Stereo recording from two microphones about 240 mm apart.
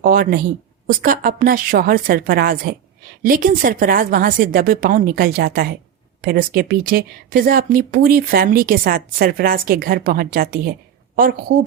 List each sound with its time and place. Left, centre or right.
0.0 s speech: right